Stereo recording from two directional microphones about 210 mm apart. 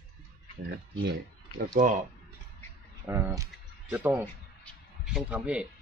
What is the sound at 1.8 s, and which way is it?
Speech, 35° right (ahead or behind).